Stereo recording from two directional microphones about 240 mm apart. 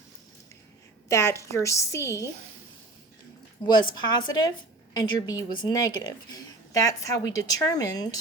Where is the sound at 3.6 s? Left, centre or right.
Centre.